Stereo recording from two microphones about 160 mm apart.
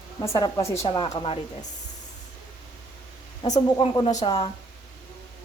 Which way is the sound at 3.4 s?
35° left (ahead or behind).